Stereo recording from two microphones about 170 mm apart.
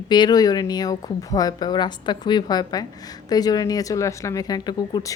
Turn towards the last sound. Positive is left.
turn(degrees=25)  # may be behind; listen again after turning